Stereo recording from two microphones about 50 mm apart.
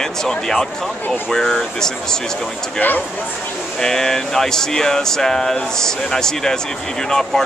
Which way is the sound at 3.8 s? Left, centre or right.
Centre.